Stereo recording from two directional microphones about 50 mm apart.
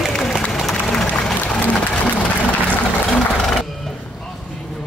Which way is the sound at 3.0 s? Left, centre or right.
Centre.